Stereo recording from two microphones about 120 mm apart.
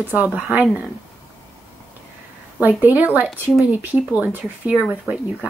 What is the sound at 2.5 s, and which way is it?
Speech, 15° right (ahead or behind).